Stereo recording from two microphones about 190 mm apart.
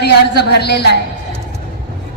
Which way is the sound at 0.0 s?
60° left (ahead or behind).